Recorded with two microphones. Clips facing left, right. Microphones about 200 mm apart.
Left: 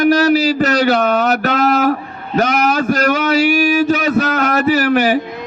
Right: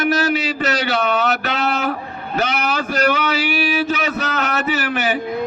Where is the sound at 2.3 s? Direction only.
40° left (ahead or behind).